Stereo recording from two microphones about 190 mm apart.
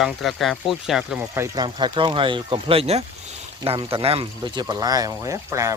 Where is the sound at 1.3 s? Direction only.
20° right (ahead or behind).